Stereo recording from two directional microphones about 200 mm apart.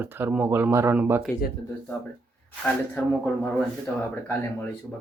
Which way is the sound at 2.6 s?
5° left (ahead or behind).